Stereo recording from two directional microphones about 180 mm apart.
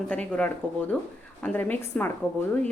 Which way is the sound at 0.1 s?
10° left (ahead or behind).